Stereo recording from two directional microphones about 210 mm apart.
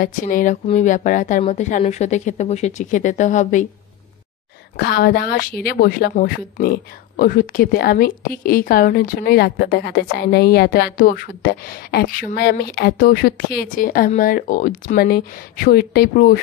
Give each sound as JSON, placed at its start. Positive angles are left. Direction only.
{"t": 0.0, "sound": "a woman's voice", "side_deg": 40}
{"t": 4.7, "sound": "speech", "side_deg": 50}